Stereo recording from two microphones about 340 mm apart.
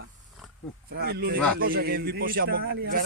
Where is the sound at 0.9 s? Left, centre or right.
Right.